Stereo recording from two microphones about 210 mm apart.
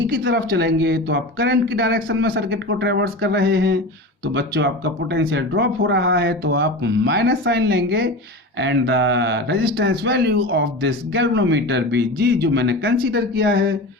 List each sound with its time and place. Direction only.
0.1 s speech: 50° right (ahead or behind)